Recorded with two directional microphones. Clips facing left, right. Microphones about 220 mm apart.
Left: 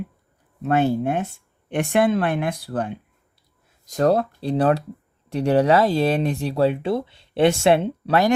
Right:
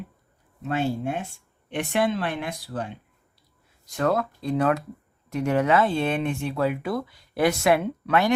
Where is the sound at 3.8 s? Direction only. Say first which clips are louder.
Left 5 dB; 40° left (ahead or behind).